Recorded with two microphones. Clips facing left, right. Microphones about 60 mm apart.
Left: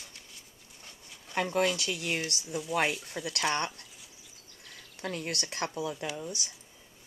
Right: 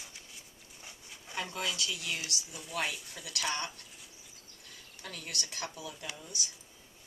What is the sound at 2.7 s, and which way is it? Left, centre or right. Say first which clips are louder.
Speech: left 6 dB; left.